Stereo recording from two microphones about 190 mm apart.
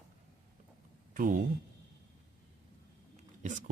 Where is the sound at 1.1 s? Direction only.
45° right (ahead or behind).